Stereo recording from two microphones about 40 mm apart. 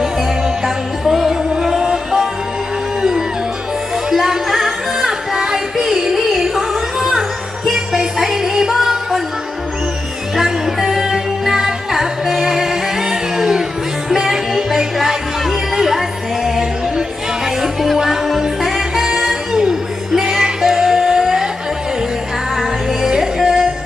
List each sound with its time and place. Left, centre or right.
0.0 s music: centre
10.3 s music: centre
22.5 s music: centre